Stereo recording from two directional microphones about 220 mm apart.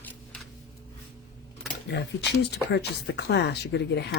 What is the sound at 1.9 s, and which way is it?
Speech, 50° left (ahead or behind).